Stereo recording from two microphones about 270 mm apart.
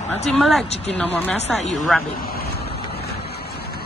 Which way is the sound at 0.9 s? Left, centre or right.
Centre.